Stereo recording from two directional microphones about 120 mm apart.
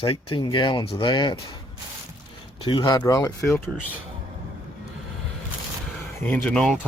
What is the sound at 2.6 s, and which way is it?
Speech, 45° left (ahead or behind).